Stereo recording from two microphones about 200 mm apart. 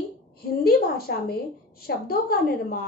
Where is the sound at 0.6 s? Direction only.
50° left (ahead or behind).